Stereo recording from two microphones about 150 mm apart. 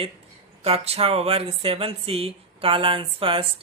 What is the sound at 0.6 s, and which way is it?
Speech, 40° right (ahead or behind).